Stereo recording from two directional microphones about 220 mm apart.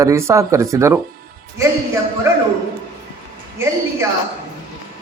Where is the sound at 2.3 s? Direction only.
15° right (ahead or behind).